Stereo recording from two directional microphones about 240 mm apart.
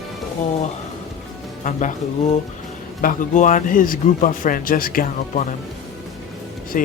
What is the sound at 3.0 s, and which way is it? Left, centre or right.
A man's voice, left.